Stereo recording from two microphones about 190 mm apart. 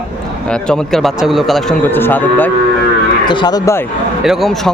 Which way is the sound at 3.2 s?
25° left (ahead or behind).